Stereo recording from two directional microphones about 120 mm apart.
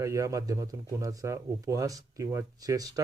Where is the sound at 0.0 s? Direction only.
25° right (ahead or behind).